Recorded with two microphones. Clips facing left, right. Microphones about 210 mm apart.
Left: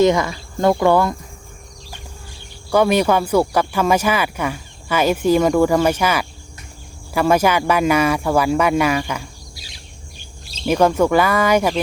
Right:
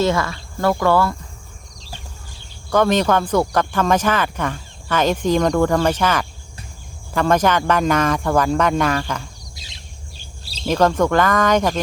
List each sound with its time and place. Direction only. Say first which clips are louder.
0.0 s speech: left 4 dB; 15° left (ahead or behind)
2.6 s speech: left 1 dB; 10° left (ahead or behind)
9.6 s bird: even; 20° right (ahead or behind)
10.7 s speech: left 2 dB; 10° left (ahead or behind)